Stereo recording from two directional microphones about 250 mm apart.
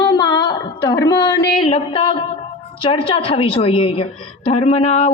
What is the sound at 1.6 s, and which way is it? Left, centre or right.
Speech, left.